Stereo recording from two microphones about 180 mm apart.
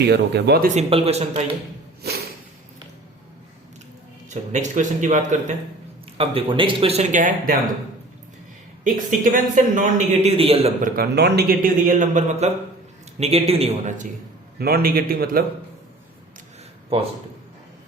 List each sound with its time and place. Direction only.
0.0 s speech: 65° right (ahead or behind)
0.7 s a man's voice: 35° right (ahead or behind)
2.0 s a sound: 60° right (ahead or behind)
4.5 s a man's voice: 45° right (ahead or behind)
6.1 s a man's voice: 30° right (ahead or behind); by 7.5 s 45° right (ahead or behind)
8.8 s a man's voice: 45° right (ahead or behind)
10.8 s a man's voice: 50° right (ahead or behind)
14.6 s a man's voice: 55° right (ahead or behind)